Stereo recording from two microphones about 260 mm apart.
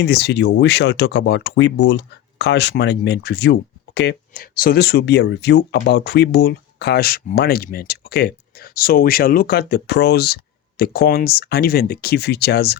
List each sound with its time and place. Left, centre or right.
0.0 s speech: left